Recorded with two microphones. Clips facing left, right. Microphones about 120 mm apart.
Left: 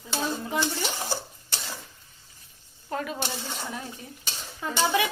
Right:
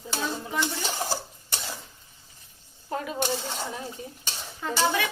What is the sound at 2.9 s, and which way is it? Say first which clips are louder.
Speech: right 2 dB; 15° right (ahead or behind).